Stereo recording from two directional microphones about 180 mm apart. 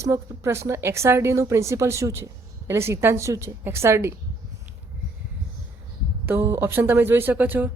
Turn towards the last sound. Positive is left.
turn(degrees=-10)  # may be behind; listen again after turning